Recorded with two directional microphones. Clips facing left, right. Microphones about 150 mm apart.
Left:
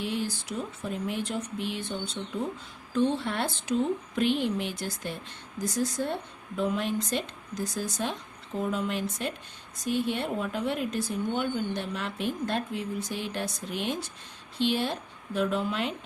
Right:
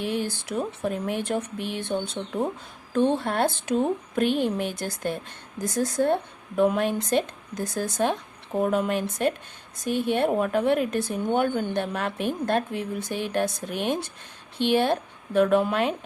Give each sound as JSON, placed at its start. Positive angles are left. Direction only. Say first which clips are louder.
{"t": 0.0, "sound": "speech", "louder": "right 3 dB", "side_deg": -55}